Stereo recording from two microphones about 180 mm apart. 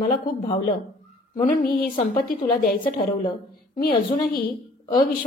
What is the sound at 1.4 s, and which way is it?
A woman's voice, 50° left (ahead or behind).